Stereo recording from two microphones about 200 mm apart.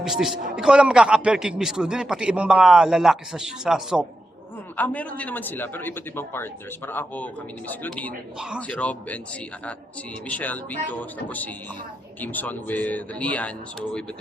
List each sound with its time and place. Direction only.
0.0 s a man's voice: centre (ahead or behind)
10.2 s a man's voice: 10° left (ahead or behind)